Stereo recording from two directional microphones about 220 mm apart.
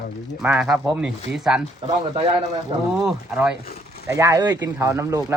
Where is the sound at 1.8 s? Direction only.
25° right (ahead or behind).